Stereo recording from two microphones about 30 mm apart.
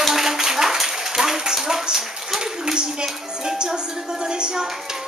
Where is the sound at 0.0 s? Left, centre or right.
Centre; by 4.6 s right.